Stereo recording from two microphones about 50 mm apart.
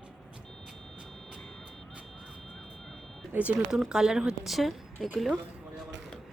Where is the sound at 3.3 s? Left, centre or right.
Right.